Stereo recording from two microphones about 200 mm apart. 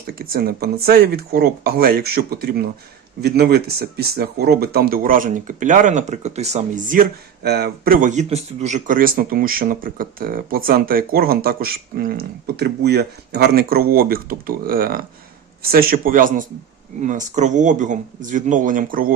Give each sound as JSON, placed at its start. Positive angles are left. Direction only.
{"t": 0.1, "sound": "speech", "side_deg": -50}